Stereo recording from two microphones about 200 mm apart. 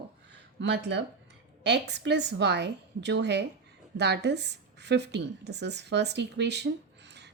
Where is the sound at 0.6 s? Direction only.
60° right (ahead or behind).